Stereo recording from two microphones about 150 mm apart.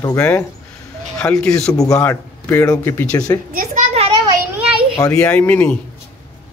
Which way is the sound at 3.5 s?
70° right (ahead or behind).